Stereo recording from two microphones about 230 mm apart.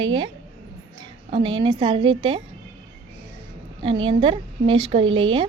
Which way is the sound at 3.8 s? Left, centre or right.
Right.